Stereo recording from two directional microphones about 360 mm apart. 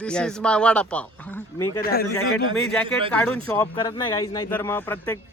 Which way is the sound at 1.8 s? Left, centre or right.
Left.